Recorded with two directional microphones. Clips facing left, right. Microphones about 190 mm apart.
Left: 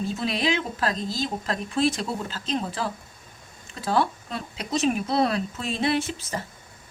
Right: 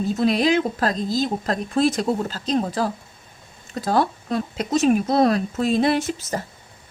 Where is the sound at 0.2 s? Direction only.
45° right (ahead or behind).